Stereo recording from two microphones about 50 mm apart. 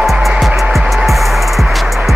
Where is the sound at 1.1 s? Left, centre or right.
Centre.